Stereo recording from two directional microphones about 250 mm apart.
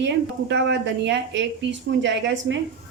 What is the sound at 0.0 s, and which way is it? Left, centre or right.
Speech, right.